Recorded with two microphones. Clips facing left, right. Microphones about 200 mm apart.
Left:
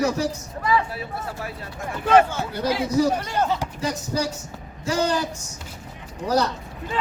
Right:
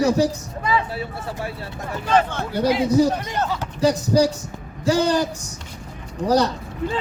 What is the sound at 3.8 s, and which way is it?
Speech, 35° right (ahead or behind).